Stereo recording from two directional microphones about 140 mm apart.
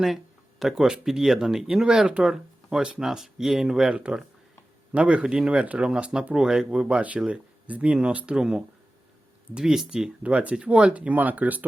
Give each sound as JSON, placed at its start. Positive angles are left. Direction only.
{"t": 0.6, "sound": "speech", "side_deg": -5}